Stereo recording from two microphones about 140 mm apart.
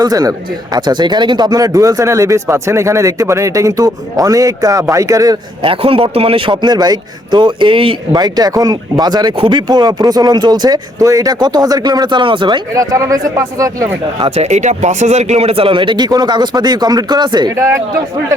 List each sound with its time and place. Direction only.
0.0 s a man's voice: 25° right (ahead or behind)
5.6 s a man's voice: 40° right (ahead or behind); by 14.3 s 25° right (ahead or behind)
14.3 s speech: 50° right (ahead or behind); by 17.5 s 30° right (ahead or behind)
17.5 s a man's voice: 20° right (ahead or behind)